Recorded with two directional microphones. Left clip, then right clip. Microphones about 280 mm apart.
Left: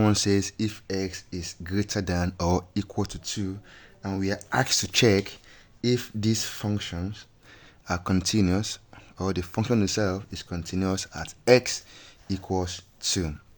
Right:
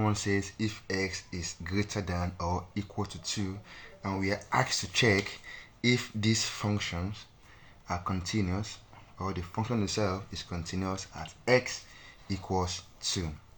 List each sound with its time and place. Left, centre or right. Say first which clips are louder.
0.0 s speech: left 7 dB; left